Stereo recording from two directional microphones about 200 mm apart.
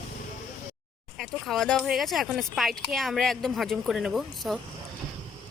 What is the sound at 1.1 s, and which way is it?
Speech, centre (ahead or behind).